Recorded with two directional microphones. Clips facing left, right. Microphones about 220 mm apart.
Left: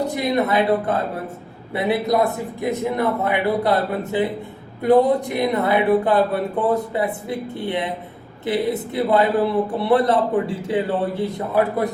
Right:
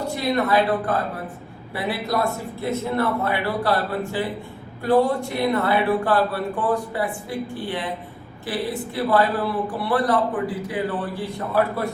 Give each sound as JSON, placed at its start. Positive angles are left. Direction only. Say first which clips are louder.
{"t": 0.1, "sound": "a man's voice", "louder": "left 1 dB", "side_deg": 20}